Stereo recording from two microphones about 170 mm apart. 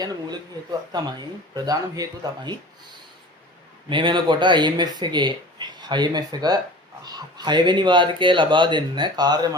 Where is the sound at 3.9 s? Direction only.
30° right (ahead or behind).